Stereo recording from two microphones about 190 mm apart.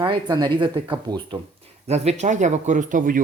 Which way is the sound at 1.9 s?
35° right (ahead or behind).